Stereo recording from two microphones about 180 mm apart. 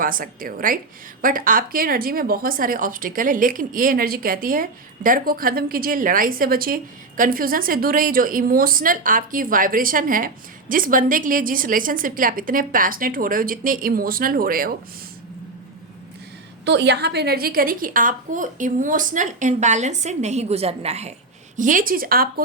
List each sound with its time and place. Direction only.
0.0 s a woman's voice: 50° right (ahead or behind)
16.6 s a woman's voice: 75° right (ahead or behind); by 21.1 s 35° right (ahead or behind)
21.5 s a woman's voice: 45° right (ahead or behind)